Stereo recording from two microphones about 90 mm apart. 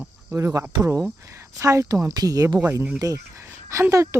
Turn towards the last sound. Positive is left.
turn(degrees=-30)  # may be behind; listen again after turning